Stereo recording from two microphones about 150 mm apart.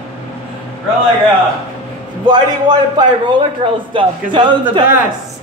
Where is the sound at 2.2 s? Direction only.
30° right (ahead or behind).